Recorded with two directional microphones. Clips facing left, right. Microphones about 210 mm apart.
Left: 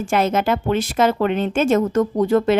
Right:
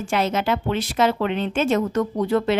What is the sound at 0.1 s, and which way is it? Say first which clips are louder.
Speech: left 3 dB; 50° left (ahead or behind).